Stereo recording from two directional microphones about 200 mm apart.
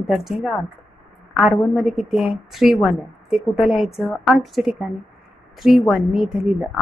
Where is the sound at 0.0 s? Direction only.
Centre (ahead or behind).